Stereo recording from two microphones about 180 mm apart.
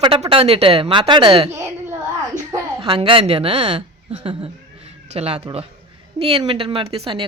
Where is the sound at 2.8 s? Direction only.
30° right (ahead or behind).